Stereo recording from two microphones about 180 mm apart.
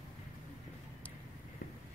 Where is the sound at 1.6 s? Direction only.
50° left (ahead or behind).